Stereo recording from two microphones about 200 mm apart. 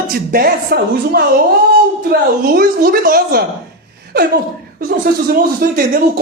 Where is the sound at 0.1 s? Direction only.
50° right (ahead or behind).